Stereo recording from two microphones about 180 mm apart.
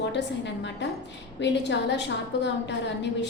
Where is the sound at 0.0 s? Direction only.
75° left (ahead or behind).